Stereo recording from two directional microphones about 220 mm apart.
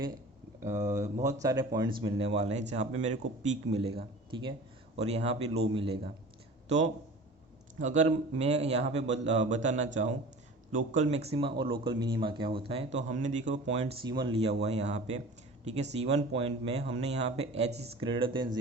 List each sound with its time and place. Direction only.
1.2 s speech: 15° right (ahead or behind)